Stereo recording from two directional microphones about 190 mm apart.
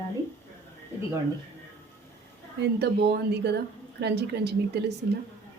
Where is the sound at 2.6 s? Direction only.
60° right (ahead or behind).